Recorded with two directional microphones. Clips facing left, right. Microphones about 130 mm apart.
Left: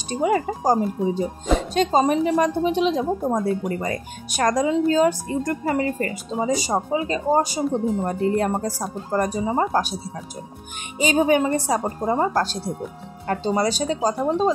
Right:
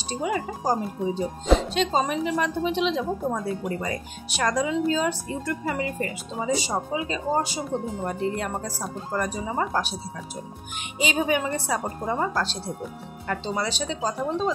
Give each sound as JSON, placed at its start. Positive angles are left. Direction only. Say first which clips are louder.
{"t": 0.2, "sound": "a woman's voice", "louder": "left 7 dB", "side_deg": 45}
{"t": 11.0, "sound": "speech", "louder": "left 6 dB", "side_deg": 40}